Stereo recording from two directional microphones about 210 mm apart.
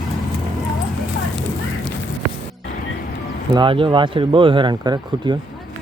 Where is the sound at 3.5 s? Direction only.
25° right (ahead or behind).